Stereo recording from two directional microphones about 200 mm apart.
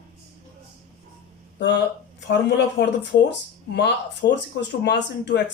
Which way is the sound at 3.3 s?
60° left (ahead or behind).